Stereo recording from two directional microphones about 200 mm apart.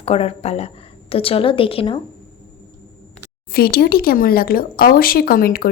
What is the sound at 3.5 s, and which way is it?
Speech, 50° left (ahead or behind).